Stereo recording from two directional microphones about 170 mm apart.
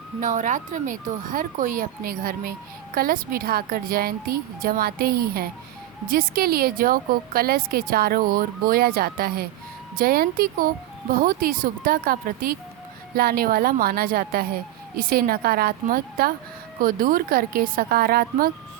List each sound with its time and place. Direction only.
0.2 s speech: 45° right (ahead or behind)